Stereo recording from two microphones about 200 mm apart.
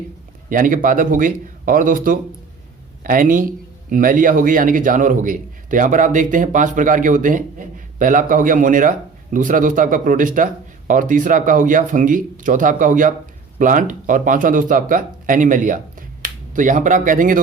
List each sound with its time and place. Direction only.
0.5 s speech: 45° right (ahead or behind)